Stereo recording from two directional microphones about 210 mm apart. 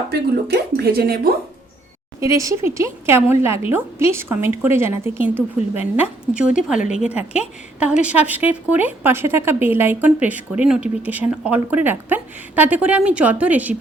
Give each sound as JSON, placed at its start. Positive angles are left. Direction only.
{"t": 0.1, "sound": "speech", "side_deg": -50}
{"t": 2.2, "sound": "a woman's voice", "side_deg": -15}